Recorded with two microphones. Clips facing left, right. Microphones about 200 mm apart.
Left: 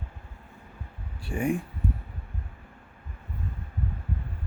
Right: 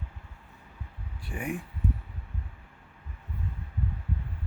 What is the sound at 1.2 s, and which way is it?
Speech, 25° left (ahead or behind).